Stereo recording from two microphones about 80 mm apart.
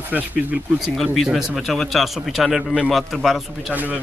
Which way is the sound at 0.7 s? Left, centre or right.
Centre.